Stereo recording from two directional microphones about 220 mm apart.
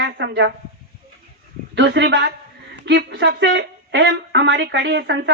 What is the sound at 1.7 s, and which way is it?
Speech, 50° right (ahead or behind).